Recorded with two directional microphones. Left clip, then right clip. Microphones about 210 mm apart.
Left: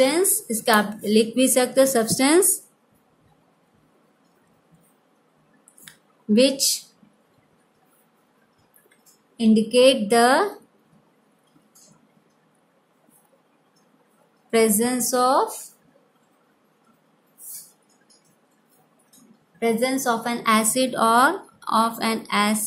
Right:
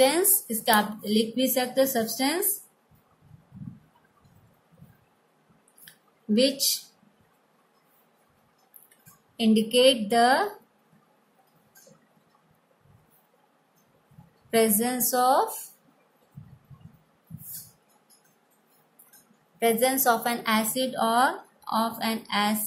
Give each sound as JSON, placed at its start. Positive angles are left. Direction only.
{"t": 0.7, "sound": "a woman's voice", "side_deg": 15}
{"t": 6.3, "sound": "a woman's voice", "side_deg": 10}
{"t": 9.4, "sound": "a woman's voice", "side_deg": 0}
{"t": 14.5, "sound": "a woman's voice", "side_deg": 10}
{"t": 19.6, "sound": "a woman's voice", "side_deg": 0}
{"t": 20.4, "sound": "a woman's voice", "side_deg": 15}